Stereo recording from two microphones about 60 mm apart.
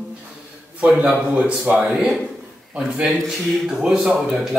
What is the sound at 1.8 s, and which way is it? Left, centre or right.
Speech, centre.